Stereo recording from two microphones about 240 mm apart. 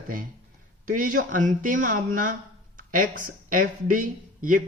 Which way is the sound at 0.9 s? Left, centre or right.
Right.